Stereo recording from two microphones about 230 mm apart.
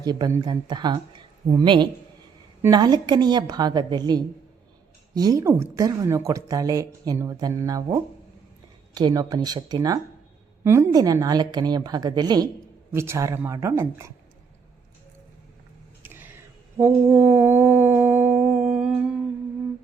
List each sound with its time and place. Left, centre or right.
0.0 s speech: centre
16.0 s a sound: centre
16.7 s humming: centre